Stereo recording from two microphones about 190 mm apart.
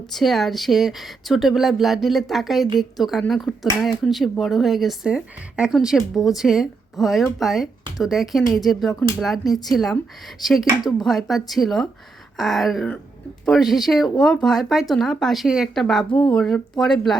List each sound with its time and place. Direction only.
0.1 s speech: centre (ahead or behind)